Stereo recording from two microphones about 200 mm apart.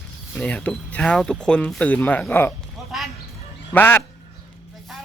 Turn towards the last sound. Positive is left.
turn(degrees=10)  # may be behind; listen again after turning